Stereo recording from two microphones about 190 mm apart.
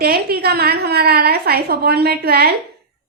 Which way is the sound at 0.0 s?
55° right (ahead or behind).